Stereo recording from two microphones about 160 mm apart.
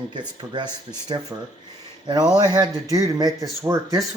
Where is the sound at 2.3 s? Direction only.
25° right (ahead or behind).